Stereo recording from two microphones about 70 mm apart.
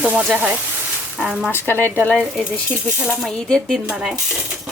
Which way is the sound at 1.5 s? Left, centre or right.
Left.